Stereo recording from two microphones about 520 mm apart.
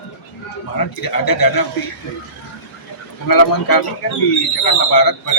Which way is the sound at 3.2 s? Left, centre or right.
Left.